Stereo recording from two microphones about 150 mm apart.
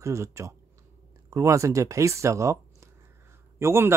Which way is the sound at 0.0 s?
20° right (ahead or behind).